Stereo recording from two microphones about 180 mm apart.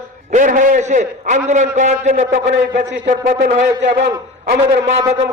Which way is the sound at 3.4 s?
75° right (ahead or behind).